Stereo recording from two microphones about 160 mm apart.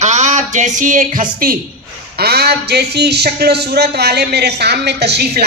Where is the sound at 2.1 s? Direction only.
85° right.